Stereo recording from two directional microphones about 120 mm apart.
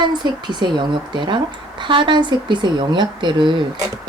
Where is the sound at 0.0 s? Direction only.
40° right (ahead or behind).